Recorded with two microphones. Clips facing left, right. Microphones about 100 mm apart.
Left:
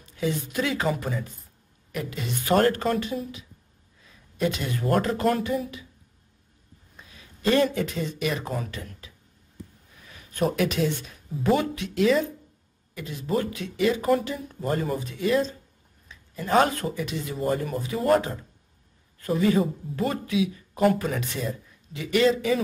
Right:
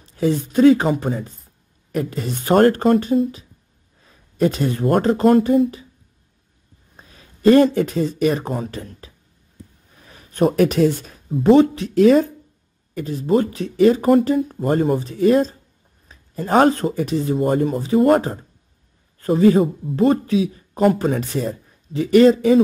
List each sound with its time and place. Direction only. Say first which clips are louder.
0.0 s a woman's voice: right 8 dB; 35° right (ahead or behind)
7.0 s speech: right 13 dB; 40° right (ahead or behind)
11.2 s speech: right 10 dB; 65° right (ahead or behind)
11.5 s a man's voice: right 12 dB; 35° right (ahead or behind)